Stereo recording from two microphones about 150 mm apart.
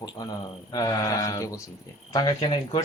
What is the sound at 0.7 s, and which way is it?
Speech, 25° left (ahead or behind).